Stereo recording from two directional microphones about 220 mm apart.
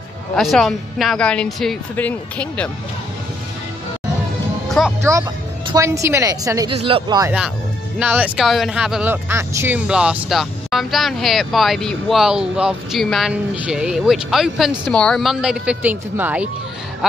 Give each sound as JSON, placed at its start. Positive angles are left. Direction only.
{"t": 0.4, "sound": "speech", "side_deg": 0}
{"t": 4.8, "sound": "speech", "side_deg": 0}
{"t": 5.7, "sound": "speech", "side_deg": -15}
{"t": 8.0, "sound": "speech", "side_deg": -5}